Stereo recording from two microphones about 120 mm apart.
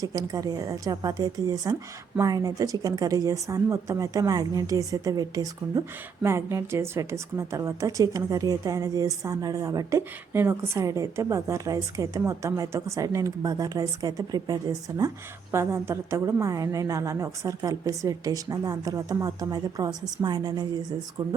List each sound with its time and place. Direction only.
0.0 s a woman's voice: 30° right (ahead or behind)
6.2 s a woman's voice: 20° right (ahead or behind)
15.5 s a woman's voice: 20° right (ahead or behind)